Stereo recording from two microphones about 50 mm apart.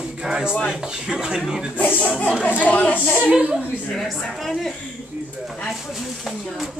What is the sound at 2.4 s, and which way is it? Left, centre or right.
Speech, left.